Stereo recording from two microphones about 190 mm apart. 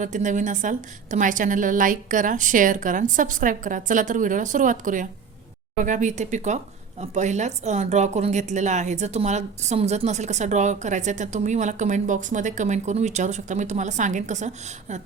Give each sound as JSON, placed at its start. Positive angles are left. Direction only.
{"t": 0.0, "sound": "a woman's voice", "side_deg": -40}